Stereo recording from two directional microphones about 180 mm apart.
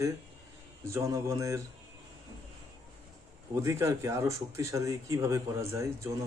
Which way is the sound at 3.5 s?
15° right (ahead or behind).